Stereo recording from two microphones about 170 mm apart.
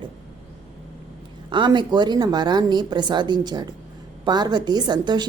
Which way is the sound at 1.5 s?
25° right (ahead or behind).